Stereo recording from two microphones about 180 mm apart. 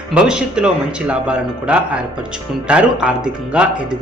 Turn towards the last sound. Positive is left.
turn(degrees=-5)  # may be behind; listen again after turning